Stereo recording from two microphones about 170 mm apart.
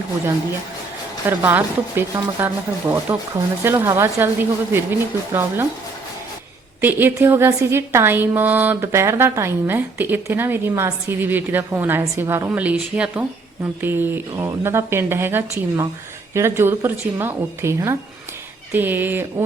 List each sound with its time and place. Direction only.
1.3 s a woman's voice: 15° right (ahead or behind)
6.8 s a woman's voice: 10° right (ahead or behind)